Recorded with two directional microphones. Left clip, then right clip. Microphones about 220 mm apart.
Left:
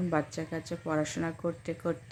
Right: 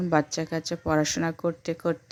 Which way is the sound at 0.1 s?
40° right (ahead or behind).